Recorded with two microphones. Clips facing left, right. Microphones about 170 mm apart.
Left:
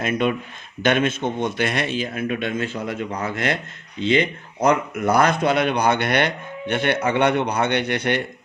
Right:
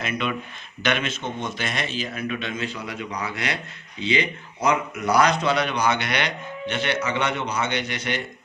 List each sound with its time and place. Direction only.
0.0 s a man's voice: 50° left (ahead or behind)